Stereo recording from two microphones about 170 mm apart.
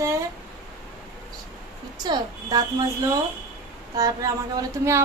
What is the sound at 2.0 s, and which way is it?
Speech, 25° right (ahead or behind).